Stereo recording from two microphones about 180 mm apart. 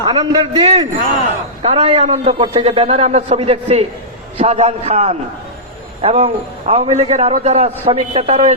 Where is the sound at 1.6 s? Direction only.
35° right (ahead or behind).